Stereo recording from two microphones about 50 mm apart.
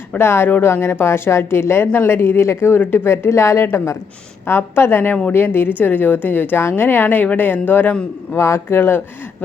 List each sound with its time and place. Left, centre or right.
0.2 s speech: left
0.4 s speech: left
2.7 s speech: left
3.2 s a woman's voice: left
8.4 s speech: left